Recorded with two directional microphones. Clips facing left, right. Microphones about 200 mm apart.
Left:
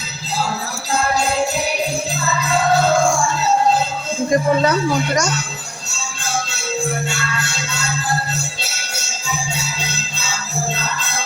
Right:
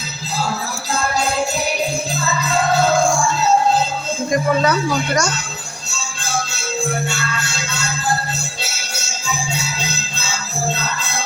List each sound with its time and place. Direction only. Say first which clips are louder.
4.3 s speech: left 1 dB; 30° left (ahead or behind)